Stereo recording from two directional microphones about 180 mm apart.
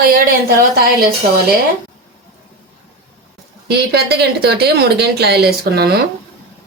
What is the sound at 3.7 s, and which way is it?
A woman's voice, 65° right (ahead or behind).